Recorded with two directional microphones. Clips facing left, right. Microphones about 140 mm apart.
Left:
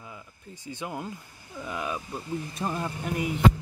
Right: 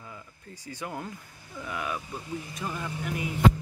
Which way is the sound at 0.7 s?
20° left (ahead or behind).